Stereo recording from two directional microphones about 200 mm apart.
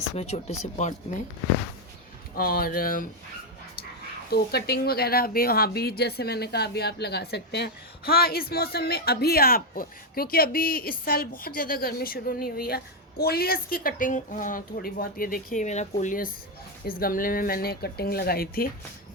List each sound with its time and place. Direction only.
0.2 s speech: 35° left (ahead or behind)
2.3 s a woman's voice: 50° left (ahead or behind)
4.3 s a woman's voice: 50° left (ahead or behind)